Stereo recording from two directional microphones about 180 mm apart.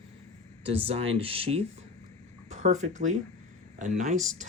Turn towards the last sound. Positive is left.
turn(degrees=-40)  # may be behind; listen again after turning